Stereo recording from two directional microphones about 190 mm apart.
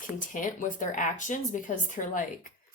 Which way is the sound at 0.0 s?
45° left (ahead or behind).